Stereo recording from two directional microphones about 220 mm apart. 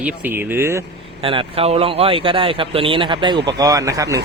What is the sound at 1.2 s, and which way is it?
Speech, 25° right (ahead or behind).